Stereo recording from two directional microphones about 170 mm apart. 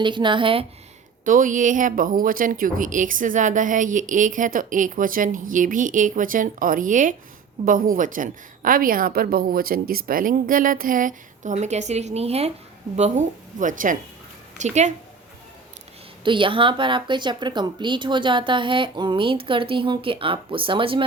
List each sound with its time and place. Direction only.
0.0 s speech: 30° right (ahead or behind)
1.2 s speech: 50° right (ahead or behind)
16.2 s speech: 30° right (ahead or behind)